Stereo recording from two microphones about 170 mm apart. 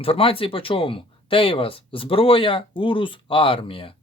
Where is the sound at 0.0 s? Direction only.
35° left (ahead or behind).